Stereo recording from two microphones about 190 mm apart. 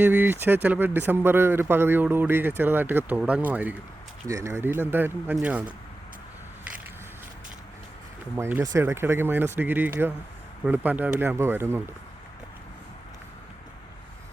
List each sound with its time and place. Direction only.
0.0 s speech: 10° right (ahead or behind)
8.4 s speech: 10° right (ahead or behind)